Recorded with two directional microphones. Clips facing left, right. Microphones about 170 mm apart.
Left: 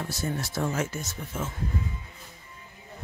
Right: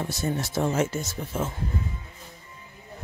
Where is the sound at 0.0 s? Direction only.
20° right (ahead or behind).